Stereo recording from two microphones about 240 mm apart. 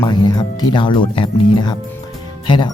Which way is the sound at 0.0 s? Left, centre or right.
Centre.